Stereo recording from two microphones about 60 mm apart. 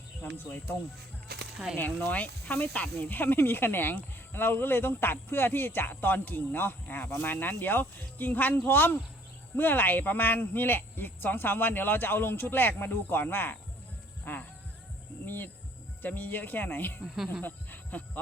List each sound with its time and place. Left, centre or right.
0.3 s speech: left
2.0 s speech: left
16.0 s speech: left
17.4 s a sound: left